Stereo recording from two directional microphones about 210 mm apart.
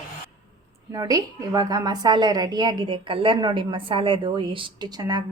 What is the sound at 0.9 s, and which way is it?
A woman's voice, 15° right (ahead or behind).